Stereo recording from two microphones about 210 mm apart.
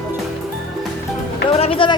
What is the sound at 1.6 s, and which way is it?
Speech, 25° left (ahead or behind).